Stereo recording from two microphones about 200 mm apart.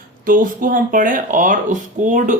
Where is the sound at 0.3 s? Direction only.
40° right (ahead or behind).